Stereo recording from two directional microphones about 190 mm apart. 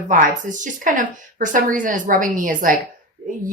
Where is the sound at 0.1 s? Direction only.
45° right (ahead or behind).